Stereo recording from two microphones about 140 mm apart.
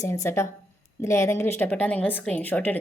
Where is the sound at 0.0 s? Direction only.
20° left (ahead or behind).